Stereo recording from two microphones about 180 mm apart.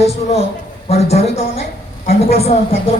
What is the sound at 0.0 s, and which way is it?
Speech, 35° left (ahead or behind).